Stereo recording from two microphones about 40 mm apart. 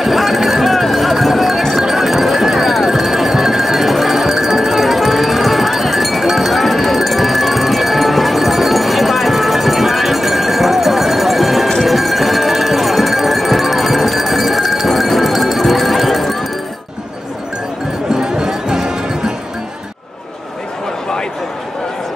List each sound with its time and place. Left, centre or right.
0.0 s run: centre
1.8 s music: centre
18.1 s music: centre